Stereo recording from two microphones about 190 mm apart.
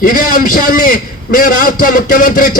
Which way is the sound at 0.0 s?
45° left (ahead or behind).